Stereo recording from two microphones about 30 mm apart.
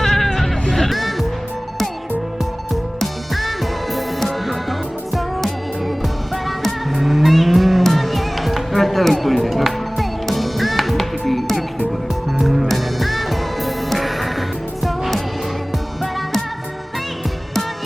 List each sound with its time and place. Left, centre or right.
0.0 s music: centre
3.0 s music: centre